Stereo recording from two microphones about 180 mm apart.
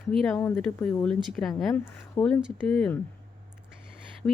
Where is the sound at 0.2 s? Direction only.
Centre (ahead or behind).